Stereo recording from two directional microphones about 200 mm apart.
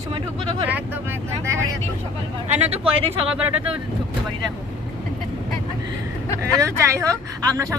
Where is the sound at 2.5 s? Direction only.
30° right (ahead or behind).